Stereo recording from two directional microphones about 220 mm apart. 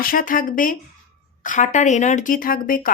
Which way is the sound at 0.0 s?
40° left (ahead or behind).